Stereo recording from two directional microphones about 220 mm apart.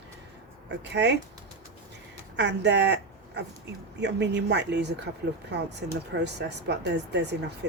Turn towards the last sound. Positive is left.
turn(degrees=-50)  # may be behind; listen again after turning